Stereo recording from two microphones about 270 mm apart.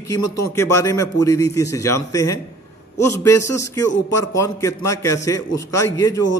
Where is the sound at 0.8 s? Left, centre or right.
Centre.